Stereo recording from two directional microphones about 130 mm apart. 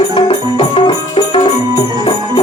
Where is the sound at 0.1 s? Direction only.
45° left (ahead or behind).